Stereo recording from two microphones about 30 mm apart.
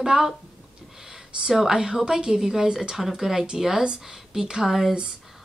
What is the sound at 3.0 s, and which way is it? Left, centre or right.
Speech, centre.